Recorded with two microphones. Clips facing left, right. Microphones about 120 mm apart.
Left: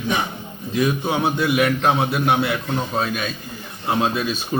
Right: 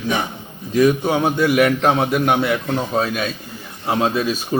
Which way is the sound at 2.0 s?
50° right (ahead or behind).